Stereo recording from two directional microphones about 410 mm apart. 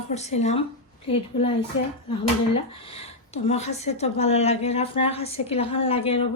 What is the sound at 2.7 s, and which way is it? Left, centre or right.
Speech, centre.